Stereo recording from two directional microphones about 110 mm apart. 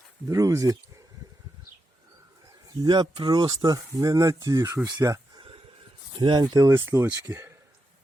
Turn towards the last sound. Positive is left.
turn(degrees=-25)  # may be behind; listen again after turning